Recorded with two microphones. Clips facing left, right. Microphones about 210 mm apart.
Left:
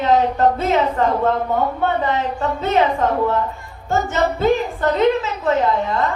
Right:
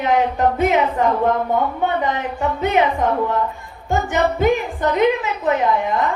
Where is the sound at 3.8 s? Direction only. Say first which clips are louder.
Even; 15° right (ahead or behind).